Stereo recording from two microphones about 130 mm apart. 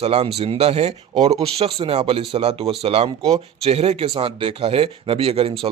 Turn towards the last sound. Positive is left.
turn(degrees=-50)  # may be behind; listen again after turning